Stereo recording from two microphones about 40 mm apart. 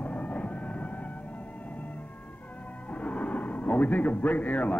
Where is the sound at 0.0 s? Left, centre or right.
Left.